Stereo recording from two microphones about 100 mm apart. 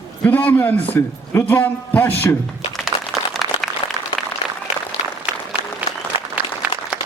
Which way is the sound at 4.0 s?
35° right (ahead or behind).